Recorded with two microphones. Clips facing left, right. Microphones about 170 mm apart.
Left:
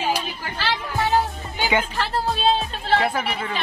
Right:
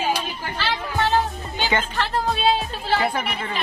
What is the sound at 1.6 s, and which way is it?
Speech, 15° left (ahead or behind).